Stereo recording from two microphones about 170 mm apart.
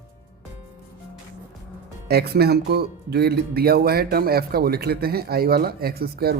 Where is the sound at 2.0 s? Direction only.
70° right (ahead or behind).